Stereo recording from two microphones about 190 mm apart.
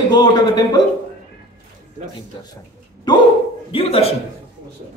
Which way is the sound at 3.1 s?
20° left (ahead or behind).